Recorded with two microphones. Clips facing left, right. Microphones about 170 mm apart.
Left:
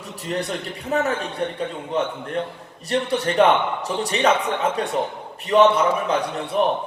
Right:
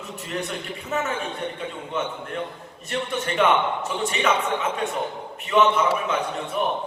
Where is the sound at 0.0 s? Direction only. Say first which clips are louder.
Left 3 dB; 35° left (ahead or behind).